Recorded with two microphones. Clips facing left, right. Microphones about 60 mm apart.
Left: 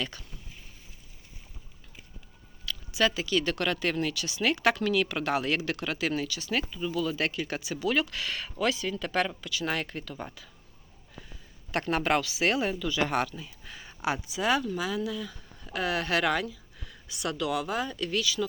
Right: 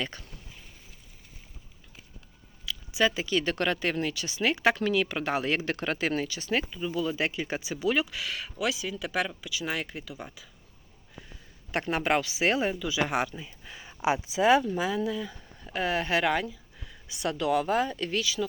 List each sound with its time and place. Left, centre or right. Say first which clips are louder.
0.0 s speech: right 1 dB; right
2.6 s speech: right 1 dB; centre
6.7 s speech: even; centre
8.2 s speech: left 1 dB; centre
11.7 s speech: even; centre
12.8 s speech: even; centre; by 18.4 s right